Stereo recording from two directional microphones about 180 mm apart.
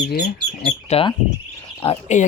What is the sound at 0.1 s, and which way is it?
Speech, 60° left (ahead or behind).